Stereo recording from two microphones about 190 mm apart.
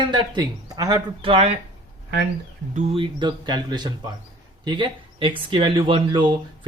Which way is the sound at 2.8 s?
30° right (ahead or behind).